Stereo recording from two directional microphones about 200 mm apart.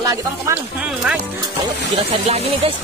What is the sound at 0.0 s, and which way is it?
Speech, 15° right (ahead or behind).